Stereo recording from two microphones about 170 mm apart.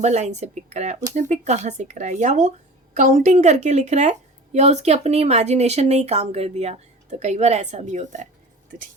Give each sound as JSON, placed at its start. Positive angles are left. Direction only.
{"t": 0.0, "sound": "speech", "side_deg": -40}